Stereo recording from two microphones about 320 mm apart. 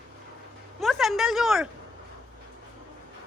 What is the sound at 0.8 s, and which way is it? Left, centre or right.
Speech, centre.